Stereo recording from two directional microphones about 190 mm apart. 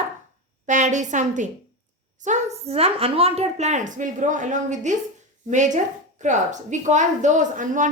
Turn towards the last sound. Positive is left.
turn(degrees=-45)  # may be behind; listen again after turning